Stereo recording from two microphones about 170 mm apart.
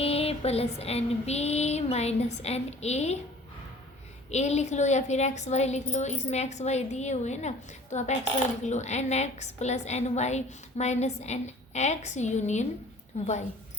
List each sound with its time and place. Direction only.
0.0 s a woman's voice: 35° left (ahead or behind)
4.3 s a woman's voice: 40° left (ahead or behind)